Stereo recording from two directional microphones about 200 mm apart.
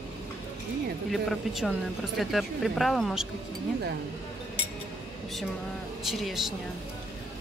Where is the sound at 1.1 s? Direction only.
Centre (ahead or behind).